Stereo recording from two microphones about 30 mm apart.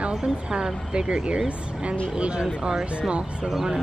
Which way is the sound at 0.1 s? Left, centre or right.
Right.